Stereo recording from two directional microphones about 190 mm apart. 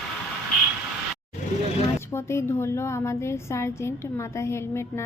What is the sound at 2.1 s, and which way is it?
A woman's voice, 15° left (ahead or behind).